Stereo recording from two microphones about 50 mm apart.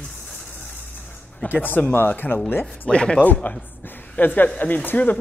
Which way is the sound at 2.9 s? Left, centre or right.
Centre.